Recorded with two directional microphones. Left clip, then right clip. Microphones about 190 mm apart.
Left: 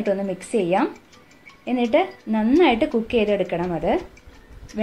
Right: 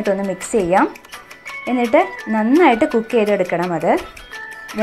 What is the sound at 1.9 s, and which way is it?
A woman's voice, 10° right (ahead or behind).